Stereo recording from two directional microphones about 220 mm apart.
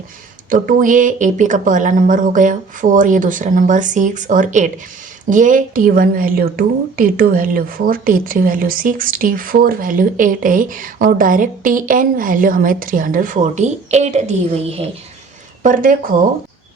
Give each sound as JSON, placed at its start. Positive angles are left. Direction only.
{"t": 0.5, "sound": "a woman's voice", "side_deg": -35}